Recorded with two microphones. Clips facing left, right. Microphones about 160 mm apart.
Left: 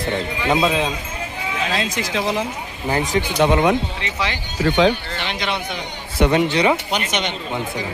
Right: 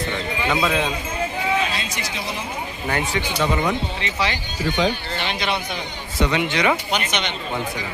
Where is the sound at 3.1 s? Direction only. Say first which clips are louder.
Left 8 dB; 55° left (ahead or behind).